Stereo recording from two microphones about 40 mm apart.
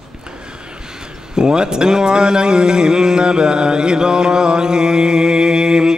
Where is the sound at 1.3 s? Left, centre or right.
Centre.